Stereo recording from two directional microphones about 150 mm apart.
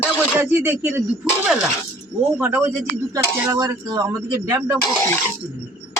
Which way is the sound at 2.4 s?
15° right (ahead or behind).